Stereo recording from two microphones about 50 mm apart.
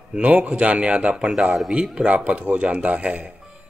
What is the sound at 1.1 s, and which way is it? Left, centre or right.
A man's voice, centre.